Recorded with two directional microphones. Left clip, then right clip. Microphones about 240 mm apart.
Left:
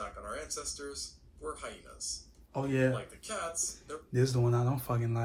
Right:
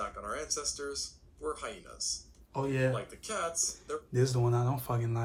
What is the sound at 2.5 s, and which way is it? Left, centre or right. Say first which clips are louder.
Speech: left 1 dB; centre.